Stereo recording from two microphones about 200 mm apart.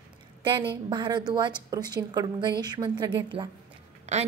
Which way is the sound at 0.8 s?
20° right (ahead or behind).